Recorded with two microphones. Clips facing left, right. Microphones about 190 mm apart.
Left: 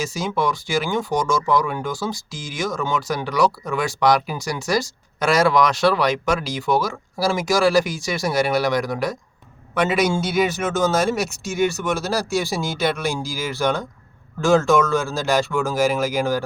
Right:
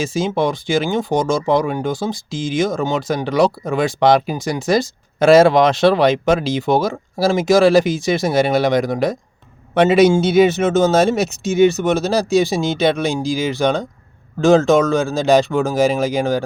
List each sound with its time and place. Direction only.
0.0 s speech: 25° right (ahead or behind)